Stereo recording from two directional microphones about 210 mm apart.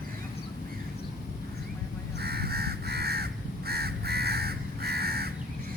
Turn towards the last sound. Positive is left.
turn(degrees=-50)  # may be behind; listen again after turning